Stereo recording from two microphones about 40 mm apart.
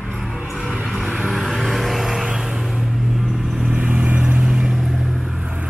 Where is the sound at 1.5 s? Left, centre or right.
Centre.